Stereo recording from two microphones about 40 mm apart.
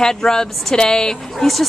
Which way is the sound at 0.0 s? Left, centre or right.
Centre.